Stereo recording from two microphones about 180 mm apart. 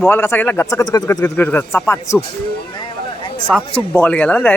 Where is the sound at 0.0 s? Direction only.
15° left (ahead or behind).